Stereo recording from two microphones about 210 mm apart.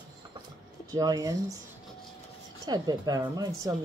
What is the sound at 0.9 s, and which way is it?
Speech, 15° right (ahead or behind).